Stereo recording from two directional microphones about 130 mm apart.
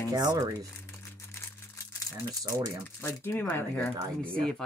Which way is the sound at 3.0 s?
20° left (ahead or behind).